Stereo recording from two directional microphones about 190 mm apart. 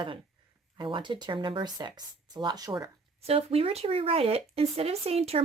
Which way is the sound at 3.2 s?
30° right (ahead or behind).